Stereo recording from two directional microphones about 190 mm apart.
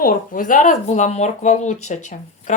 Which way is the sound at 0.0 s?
45° left (ahead or behind).